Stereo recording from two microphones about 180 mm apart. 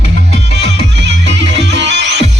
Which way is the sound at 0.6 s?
75° right (ahead or behind).